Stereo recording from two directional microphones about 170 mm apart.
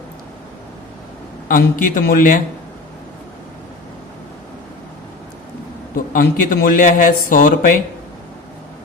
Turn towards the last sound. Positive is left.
turn(degrees=55)  # may be behind; listen again after turning